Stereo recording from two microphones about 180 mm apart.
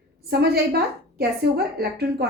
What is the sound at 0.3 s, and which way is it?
A woman's voice, 65° right (ahead or behind).